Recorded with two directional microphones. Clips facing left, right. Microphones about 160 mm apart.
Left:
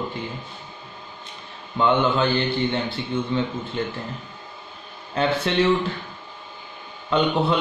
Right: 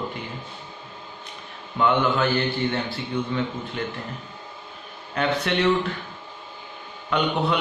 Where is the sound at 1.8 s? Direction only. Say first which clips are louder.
Left 1 dB; 25° left (ahead or behind).